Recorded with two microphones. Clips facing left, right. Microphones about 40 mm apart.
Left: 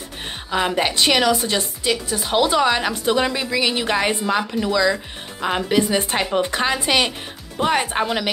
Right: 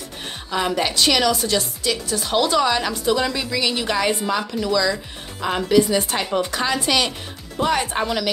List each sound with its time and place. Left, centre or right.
0.5 s a woman's voice: centre